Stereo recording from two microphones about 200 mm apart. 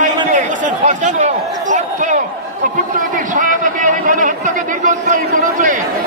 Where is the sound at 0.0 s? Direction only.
40° right (ahead or behind).